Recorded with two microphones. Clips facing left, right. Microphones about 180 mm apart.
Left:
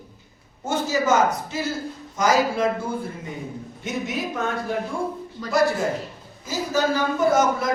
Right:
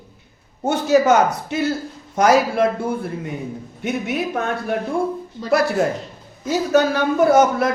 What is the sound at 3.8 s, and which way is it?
A man's voice, 60° right (ahead or behind).